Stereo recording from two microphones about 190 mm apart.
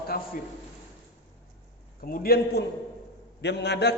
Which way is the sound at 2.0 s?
50° left (ahead or behind).